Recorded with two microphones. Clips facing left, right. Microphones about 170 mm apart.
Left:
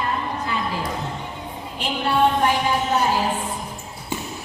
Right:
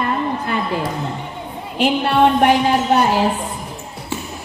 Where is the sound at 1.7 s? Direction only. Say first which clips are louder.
Right 6 dB; 70° right (ahead or behind).